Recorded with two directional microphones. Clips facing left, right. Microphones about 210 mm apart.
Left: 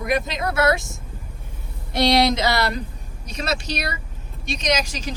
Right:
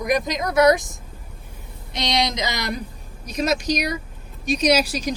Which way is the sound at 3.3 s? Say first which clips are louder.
Right 5 dB; 10° right (ahead or behind).